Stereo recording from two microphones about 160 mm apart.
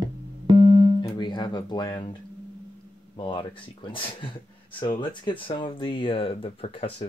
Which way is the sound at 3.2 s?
30° left (ahead or behind).